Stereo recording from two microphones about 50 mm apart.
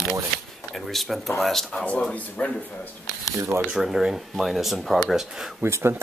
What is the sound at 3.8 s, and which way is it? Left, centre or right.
Speech, centre.